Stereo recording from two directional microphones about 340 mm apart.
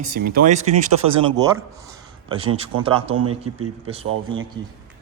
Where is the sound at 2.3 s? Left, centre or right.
Centre.